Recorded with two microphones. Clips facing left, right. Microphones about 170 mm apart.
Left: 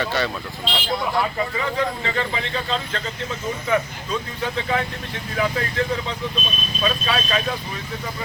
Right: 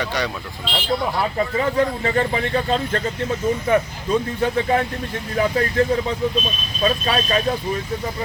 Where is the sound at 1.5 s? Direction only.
45° right (ahead or behind).